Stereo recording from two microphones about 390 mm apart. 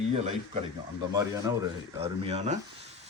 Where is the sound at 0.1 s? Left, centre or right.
Centre.